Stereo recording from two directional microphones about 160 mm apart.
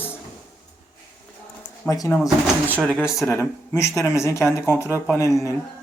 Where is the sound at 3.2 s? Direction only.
15° left (ahead or behind).